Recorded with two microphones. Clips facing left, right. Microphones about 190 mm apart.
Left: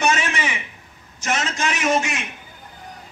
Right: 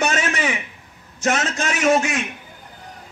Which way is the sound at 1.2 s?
50° right (ahead or behind).